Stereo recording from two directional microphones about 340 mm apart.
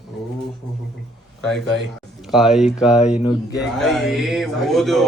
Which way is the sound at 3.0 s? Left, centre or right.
Centre.